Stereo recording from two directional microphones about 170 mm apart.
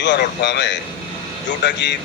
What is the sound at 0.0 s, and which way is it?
Speech, 90° left.